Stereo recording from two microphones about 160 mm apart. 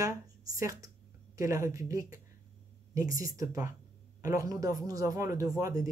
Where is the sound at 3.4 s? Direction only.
20° right (ahead or behind).